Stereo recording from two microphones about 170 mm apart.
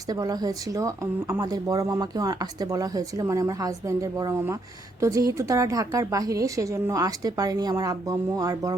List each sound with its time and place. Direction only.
0.1 s speech: 20° right (ahead or behind)